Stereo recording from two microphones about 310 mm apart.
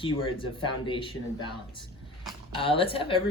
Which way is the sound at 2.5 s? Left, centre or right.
Centre.